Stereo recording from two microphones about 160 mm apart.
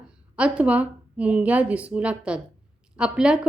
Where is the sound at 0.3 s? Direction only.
5° right (ahead or behind).